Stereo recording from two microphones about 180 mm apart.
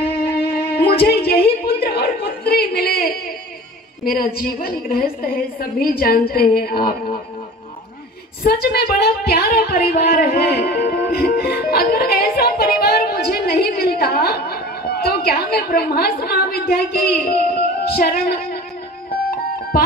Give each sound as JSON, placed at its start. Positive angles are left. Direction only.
{"t": 0.0, "sound": "music", "side_deg": 60}
{"t": 4.0, "sound": "a woman's voice", "side_deg": 55}
{"t": 8.5, "sound": "a woman's voice", "side_deg": 60}
{"t": 17.6, "sound": "music", "side_deg": 60}
{"t": 19.7, "sound": "music", "side_deg": 55}